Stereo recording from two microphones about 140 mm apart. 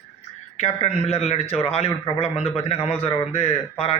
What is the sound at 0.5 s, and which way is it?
A man's voice, 50° left (ahead or behind).